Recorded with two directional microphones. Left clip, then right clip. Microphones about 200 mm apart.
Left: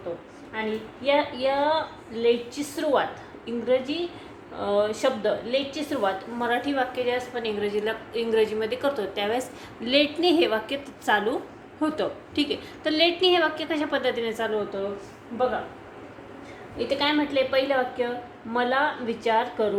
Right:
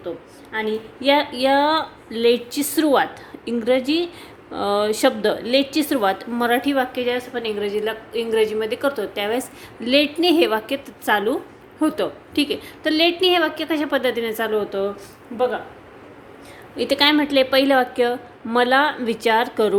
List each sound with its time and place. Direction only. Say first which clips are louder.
0.5 s a sound: right 6 dB; 60° right (ahead or behind)
1.0 s a woman's voice: right 5 dB; 60° right (ahead or behind); by 14.8 s 40° right (ahead or behind)
16.7 s a woman's voice: right 7 dB; 60° right (ahead or behind)